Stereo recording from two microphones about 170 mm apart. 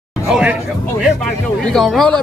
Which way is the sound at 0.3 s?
5° right (ahead or behind).